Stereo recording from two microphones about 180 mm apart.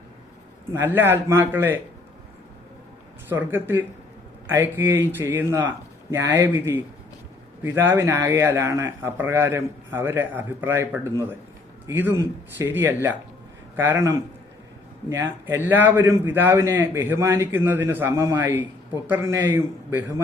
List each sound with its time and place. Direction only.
0.9 s a man's voice: 10° right (ahead or behind)
3.2 s a man's voice: 10° right (ahead or behind)